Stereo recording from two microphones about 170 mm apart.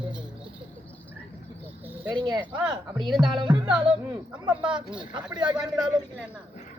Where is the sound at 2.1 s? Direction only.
25° right (ahead or behind).